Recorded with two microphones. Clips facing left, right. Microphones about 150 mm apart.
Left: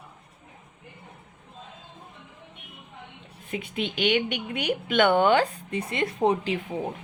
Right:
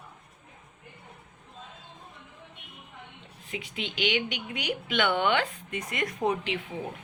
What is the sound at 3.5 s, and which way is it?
Speech, 50° left (ahead or behind).